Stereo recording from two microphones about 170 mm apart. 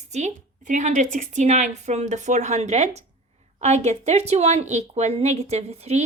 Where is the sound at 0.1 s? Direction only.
45° right (ahead or behind).